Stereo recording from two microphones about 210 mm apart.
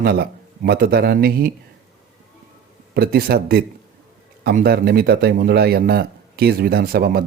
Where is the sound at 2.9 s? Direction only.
45° right (ahead or behind).